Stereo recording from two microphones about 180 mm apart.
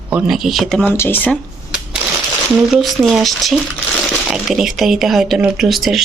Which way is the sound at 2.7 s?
Centre (ahead or behind).